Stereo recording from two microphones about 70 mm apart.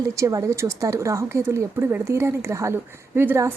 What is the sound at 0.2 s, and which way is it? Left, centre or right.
Speech, right.